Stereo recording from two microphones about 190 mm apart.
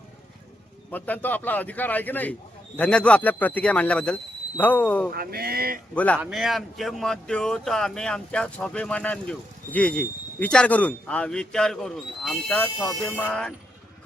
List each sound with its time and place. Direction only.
0.9 s speech: 10° left (ahead or behind)
5.1 s speech: 55° right (ahead or behind)
5.9 s speech: 5° left (ahead or behind)